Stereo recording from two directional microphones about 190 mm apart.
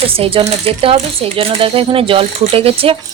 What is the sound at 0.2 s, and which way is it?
A woman's voice, 30° right (ahead or behind).